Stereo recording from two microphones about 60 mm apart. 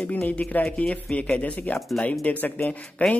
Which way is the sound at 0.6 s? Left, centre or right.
Centre.